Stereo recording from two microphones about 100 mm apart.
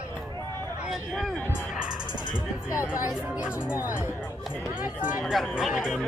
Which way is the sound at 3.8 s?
30° left (ahead or behind).